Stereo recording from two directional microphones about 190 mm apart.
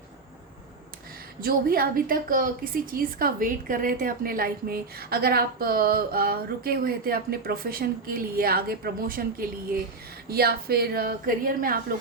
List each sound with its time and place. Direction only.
1.4 s a woman's voice: 50° right (ahead or behind)